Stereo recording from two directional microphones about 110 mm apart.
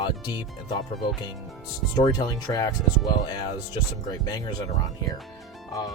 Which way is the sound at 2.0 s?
35° left (ahead or behind).